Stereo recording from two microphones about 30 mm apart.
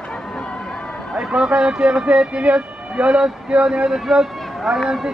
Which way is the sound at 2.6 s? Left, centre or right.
Right.